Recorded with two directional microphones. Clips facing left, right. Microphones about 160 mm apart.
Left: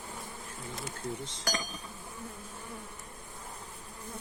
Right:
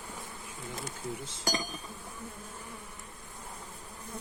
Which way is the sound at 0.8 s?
Centre (ahead or behind).